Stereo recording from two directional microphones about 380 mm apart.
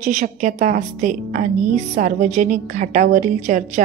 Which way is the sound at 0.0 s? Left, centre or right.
Centre.